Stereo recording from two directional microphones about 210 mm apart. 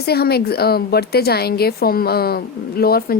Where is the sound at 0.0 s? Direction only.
50° left (ahead or behind).